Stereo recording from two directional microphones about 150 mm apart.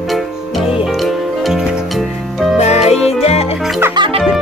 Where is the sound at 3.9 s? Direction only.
35° right (ahead or behind).